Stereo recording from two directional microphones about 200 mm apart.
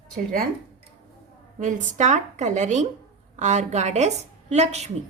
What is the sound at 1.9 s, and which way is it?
A woman's voice, 35° right (ahead or behind).